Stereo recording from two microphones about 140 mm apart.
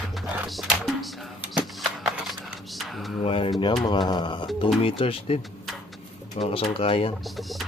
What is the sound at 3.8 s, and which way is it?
Speech, 30° left (ahead or behind).